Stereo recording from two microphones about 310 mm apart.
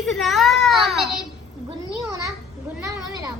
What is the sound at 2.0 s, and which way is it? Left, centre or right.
A child's voice, centre.